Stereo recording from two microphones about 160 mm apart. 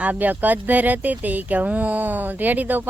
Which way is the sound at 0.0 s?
10° right (ahead or behind).